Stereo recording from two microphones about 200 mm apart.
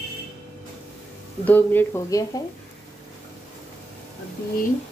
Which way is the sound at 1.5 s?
10° left (ahead or behind).